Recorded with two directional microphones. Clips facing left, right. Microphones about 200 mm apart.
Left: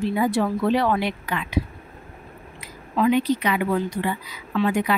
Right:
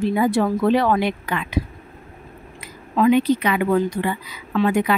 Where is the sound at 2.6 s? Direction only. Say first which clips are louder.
Right 4 dB; 50° right (ahead or behind).